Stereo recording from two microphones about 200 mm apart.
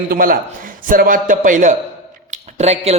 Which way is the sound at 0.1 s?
45° right (ahead or behind).